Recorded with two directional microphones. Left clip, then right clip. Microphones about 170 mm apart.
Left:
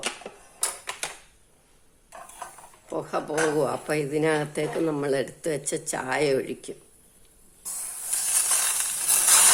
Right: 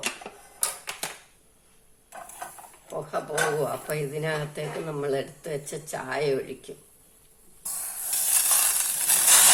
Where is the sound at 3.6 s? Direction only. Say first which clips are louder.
Left 3 dB; 65° left (ahead or behind).